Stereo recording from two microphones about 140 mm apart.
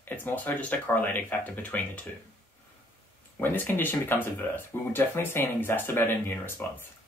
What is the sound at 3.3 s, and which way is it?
Speech, 15° left (ahead or behind).